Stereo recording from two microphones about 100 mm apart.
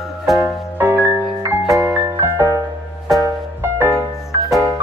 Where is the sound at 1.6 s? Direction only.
Centre (ahead or behind).